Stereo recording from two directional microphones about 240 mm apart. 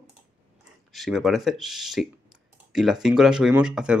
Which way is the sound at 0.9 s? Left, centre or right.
Centre.